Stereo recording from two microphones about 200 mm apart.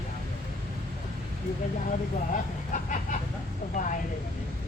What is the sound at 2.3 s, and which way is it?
Speech, 40° left (ahead or behind).